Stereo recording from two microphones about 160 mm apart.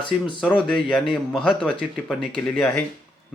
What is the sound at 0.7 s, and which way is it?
Speech, 5° left (ahead or behind).